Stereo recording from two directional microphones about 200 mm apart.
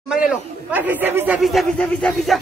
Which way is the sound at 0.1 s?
5° right (ahead or behind).